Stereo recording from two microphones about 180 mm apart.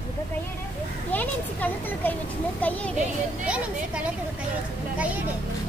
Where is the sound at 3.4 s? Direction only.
5° right (ahead or behind).